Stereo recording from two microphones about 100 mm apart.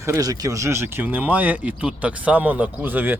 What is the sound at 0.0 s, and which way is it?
Speech, 35° right (ahead or behind).